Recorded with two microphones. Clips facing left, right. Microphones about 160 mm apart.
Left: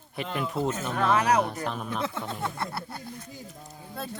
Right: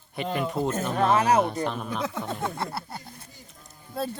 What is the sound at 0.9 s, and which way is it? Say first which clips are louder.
Speech: right 2 dB; 30° right (ahead or behind).